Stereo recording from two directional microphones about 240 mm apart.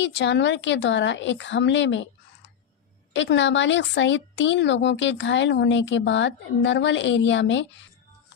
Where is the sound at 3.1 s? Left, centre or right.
Left.